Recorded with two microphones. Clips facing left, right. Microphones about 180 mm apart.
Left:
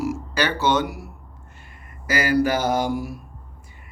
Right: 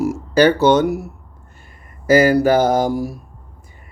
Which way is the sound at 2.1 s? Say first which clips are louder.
Right 8 dB; 45° right (ahead or behind).